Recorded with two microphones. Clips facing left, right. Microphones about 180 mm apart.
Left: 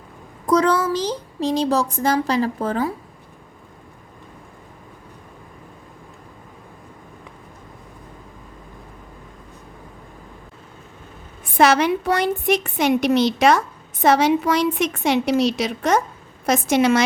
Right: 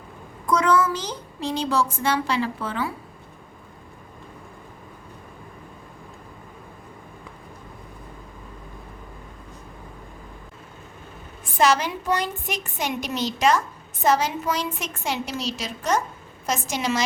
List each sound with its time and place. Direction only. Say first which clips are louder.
0.4 s a child's voice: left 3 dB; 35° left (ahead or behind)
11.5 s a woman's voice: left 5 dB; 70° left (ahead or behind)